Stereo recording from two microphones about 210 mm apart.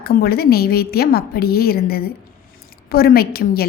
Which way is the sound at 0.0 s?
50° left (ahead or behind).